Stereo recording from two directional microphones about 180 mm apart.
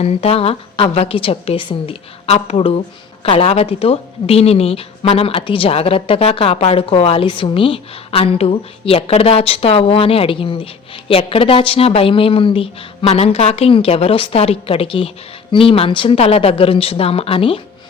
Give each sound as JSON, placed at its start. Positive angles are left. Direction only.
{"t": 0.0, "sound": "a woman's voice", "side_deg": 35}